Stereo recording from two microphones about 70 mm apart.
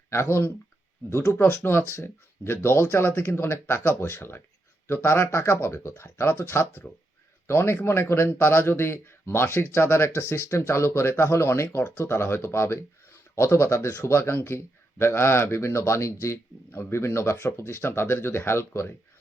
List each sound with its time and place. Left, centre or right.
0.1 s speech: left
5.7 s speech: left